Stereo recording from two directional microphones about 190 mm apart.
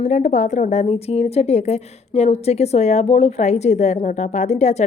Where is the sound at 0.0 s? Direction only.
40° left (ahead or behind).